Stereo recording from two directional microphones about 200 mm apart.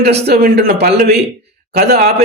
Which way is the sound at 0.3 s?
50° right (ahead or behind).